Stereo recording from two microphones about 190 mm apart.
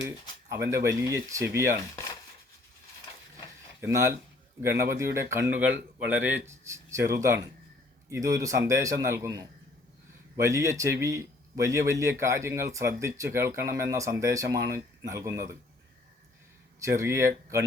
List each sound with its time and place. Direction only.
0.5 s speech: 15° right (ahead or behind)
3.8 s speech: 15° right (ahead or behind)
16.8 s speech: 15° right (ahead or behind)